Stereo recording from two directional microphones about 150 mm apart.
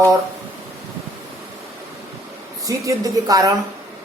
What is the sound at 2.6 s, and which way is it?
Speech, 20° right (ahead or behind).